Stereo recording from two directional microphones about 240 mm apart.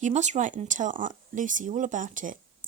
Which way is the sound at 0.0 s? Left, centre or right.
Right.